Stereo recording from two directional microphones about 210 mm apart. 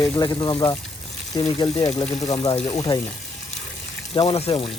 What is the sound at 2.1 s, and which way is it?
Speech, 30° left (ahead or behind).